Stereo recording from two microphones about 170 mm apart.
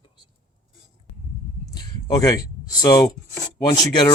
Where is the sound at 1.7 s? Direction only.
20° left (ahead or behind).